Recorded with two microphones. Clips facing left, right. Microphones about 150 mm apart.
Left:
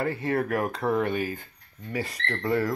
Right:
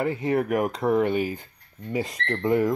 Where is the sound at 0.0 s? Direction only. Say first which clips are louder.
Right 3 dB; 15° right (ahead or behind).